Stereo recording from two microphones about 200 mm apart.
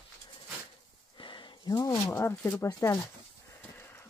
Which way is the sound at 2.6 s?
15° left (ahead or behind).